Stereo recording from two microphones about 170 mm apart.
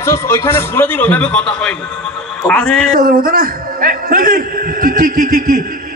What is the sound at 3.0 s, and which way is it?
A man's voice, 55° right (ahead or behind).